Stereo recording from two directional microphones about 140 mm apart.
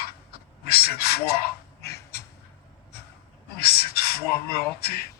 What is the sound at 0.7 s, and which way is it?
Speech, 90° left.